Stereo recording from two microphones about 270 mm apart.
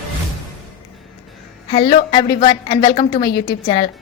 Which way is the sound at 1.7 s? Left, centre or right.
Centre.